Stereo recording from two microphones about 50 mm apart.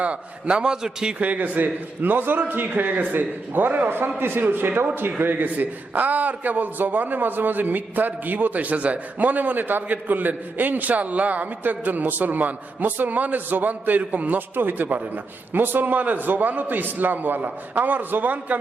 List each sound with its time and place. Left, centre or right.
0.0 s a man's voice: right
1.2 s a man's voice: right